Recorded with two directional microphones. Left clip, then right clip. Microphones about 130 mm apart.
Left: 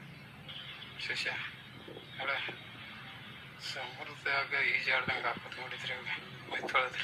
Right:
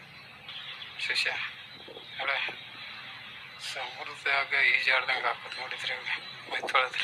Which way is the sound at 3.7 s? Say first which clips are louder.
Right 5 dB; 30° right (ahead or behind).